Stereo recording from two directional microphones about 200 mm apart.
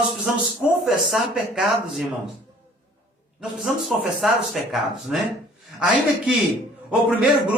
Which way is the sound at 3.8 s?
Centre (ahead or behind).